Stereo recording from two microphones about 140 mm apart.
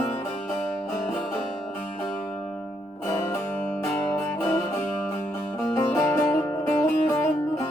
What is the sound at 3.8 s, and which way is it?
Music, 15° left (ahead or behind).